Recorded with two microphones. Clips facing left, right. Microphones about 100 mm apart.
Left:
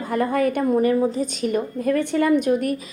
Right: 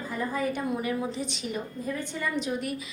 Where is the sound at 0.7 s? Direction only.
45° left (ahead or behind).